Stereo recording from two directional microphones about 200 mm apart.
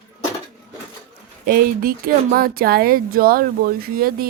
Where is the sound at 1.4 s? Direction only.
45° right (ahead or behind).